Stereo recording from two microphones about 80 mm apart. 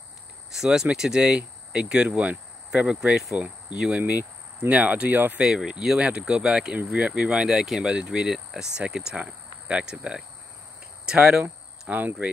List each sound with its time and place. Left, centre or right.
0.5 s speech: centre
4.0 s speech: right
5.4 s speech: centre
11.9 s speech: right